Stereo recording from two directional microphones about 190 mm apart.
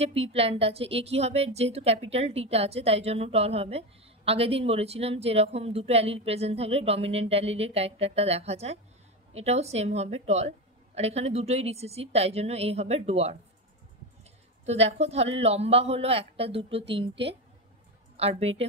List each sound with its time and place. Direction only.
0.0 s a woman's voice: 30° right (ahead or behind)
14.7 s a woman's voice: 35° right (ahead or behind)
18.4 s a woman's voice: 30° right (ahead or behind)